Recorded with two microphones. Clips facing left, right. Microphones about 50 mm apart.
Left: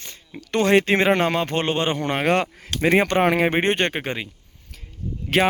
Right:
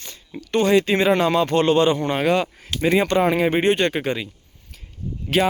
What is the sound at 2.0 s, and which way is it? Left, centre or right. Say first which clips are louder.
Speech: right 1 dB; left.